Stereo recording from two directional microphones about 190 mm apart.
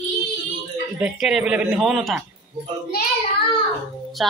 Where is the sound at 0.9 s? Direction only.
5° right (ahead or behind).